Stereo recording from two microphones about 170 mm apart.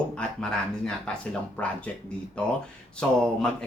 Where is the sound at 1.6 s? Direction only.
10° left (ahead or behind).